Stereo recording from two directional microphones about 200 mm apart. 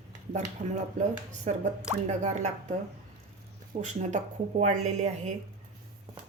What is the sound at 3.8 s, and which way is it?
Speech, 35° right (ahead or behind).